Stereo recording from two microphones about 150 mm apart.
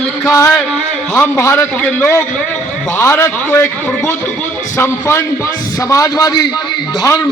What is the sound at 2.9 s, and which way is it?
Speech, 20° left (ahead or behind).